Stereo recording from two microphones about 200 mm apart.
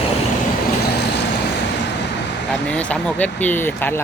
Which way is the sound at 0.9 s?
55° left (ahead or behind).